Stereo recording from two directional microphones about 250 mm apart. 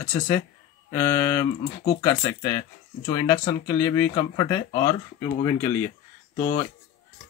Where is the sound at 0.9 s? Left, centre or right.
Centre.